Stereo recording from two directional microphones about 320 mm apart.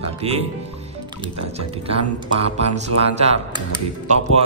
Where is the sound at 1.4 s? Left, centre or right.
Centre.